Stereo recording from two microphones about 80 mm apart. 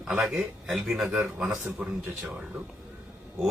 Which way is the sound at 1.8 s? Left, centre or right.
Centre.